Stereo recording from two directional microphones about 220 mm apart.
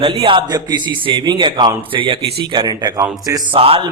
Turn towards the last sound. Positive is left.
turn(degrees=-25)  # may be behind; listen again after turning